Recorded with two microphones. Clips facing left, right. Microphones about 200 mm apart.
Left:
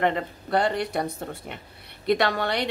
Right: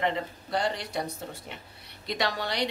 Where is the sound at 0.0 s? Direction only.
55° left (ahead or behind).